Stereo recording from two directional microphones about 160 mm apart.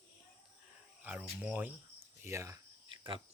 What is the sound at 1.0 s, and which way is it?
Speech, 10° right (ahead or behind).